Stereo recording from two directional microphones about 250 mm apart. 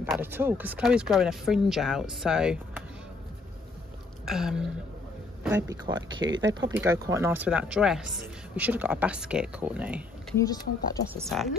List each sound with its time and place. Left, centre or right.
0.0 s speech: centre
4.3 s speech: centre
5.6 s speech: centre
6.1 s speech: right
6.4 s speech: centre
10.3 s speech: centre
11.2 s speech: centre